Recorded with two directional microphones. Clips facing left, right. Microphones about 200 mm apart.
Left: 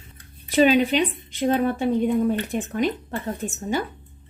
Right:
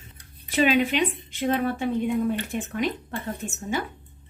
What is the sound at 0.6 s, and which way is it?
A woman's voice, 35° left (ahead or behind).